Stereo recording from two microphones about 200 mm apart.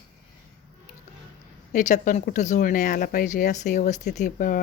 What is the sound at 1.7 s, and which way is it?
Speech, 40° left (ahead or behind).